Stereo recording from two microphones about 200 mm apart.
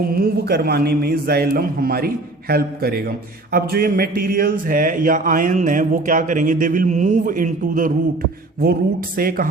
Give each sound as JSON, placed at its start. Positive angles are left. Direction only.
{"t": 0.0, "sound": "speech", "side_deg": -50}